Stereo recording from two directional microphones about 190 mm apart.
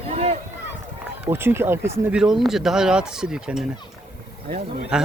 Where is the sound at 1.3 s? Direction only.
10° right (ahead or behind).